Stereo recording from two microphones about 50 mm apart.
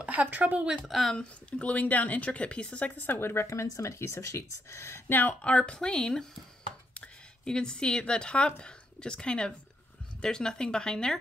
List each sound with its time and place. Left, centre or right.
0.0 s speech: right
0.8 s speech: centre
1.1 s a woman's voice: left
3.2 s a woman's voice: left
3.4 s speech: left
5.0 s speech: left
5.4 s speech: left